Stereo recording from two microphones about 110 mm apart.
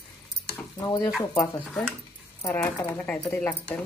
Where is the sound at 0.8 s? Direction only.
35° left (ahead or behind).